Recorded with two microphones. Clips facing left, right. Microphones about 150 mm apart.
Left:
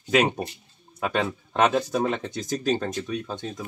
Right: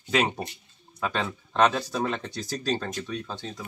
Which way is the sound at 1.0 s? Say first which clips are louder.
Left 3 dB; 10° left (ahead or behind).